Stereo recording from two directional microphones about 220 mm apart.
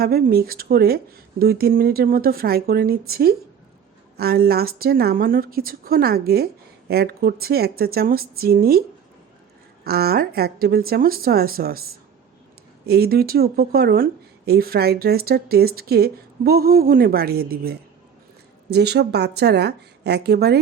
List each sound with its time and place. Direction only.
0.0 s speech: 45° right (ahead or behind)
9.8 s speech: 45° right (ahead or behind)
12.8 s speech: 45° right (ahead or behind)